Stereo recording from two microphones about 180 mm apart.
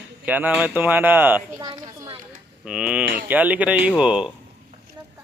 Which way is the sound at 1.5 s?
20° right (ahead or behind).